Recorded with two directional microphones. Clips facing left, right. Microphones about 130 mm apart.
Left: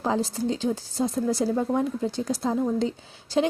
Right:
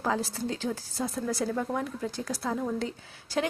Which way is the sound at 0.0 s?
20° left (ahead or behind).